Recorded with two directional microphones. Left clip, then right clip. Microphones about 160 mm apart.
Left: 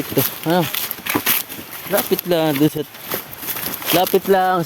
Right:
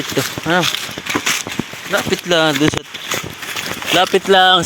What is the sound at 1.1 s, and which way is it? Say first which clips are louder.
Walk: right 3 dB; centre (ahead or behind).